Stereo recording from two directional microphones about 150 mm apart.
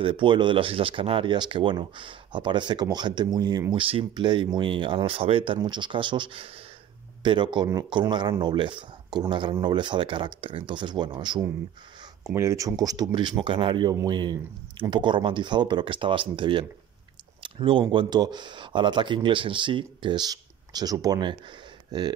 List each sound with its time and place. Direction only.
0.0 s speech: 35° right (ahead or behind)